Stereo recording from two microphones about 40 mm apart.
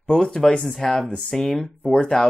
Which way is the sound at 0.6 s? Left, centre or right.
Centre.